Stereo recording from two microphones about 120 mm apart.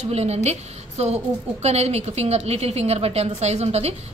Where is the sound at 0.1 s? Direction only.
65° right (ahead or behind).